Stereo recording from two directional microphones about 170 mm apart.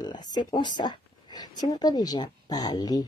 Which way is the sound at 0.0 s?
25° left (ahead or behind).